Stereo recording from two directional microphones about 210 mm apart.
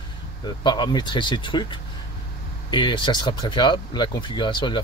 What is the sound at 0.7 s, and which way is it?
Speech, 20° left (ahead or behind).